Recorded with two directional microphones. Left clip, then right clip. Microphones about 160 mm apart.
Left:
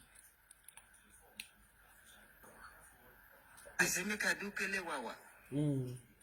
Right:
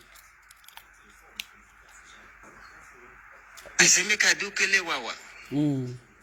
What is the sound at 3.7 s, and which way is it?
A man's voice, 15° right (ahead or behind).